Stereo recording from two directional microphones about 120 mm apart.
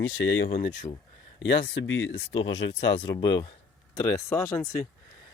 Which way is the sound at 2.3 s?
55° left (ahead or behind).